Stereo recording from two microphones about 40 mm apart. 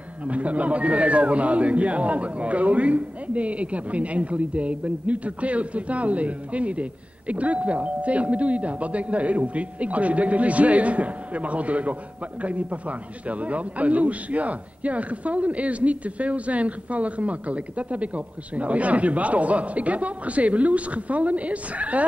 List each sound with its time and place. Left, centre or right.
0.2 s a man's voice: right